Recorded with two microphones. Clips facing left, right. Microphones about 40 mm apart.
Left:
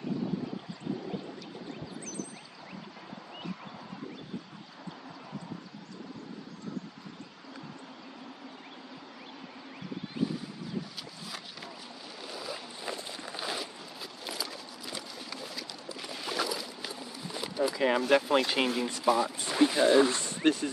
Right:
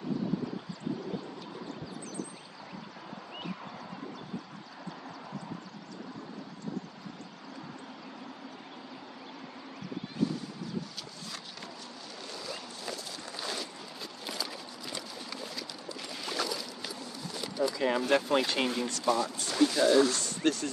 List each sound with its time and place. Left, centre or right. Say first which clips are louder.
12.2 s boat: left 2 dB; centre
12.9 s walk: left 1 dB; left
14.2 s a sound: even; centre
18.0 s speech: left 1 dB; centre